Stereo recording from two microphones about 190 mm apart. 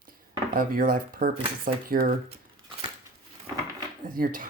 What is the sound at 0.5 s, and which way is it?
Speech, 50° right (ahead or behind).